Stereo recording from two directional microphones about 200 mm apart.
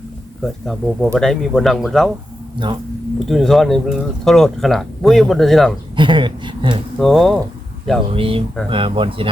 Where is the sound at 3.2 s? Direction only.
Centre (ahead or behind).